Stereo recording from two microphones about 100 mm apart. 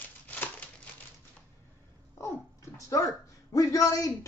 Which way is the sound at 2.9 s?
35° left (ahead or behind).